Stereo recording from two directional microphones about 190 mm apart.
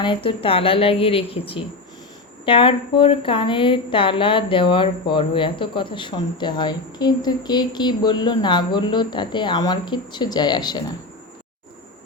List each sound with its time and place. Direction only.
0.0 s a woman's voice: 25° left (ahead or behind)